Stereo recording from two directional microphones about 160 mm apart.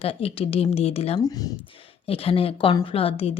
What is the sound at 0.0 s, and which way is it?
A woman's voice, 35° left (ahead or behind).